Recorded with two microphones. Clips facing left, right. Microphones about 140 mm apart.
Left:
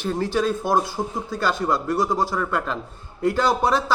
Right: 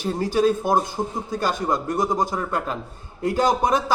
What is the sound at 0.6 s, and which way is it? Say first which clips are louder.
Speech: even; 20° right (ahead or behind).